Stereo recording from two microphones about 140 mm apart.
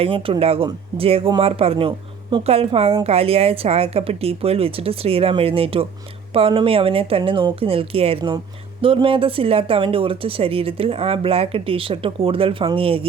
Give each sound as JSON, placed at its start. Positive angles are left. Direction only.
{"t": 0.0, "sound": "a woman's voice", "side_deg": -40}